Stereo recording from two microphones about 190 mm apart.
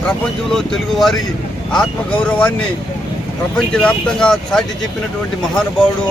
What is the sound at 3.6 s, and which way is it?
Speech, 5° left (ahead or behind).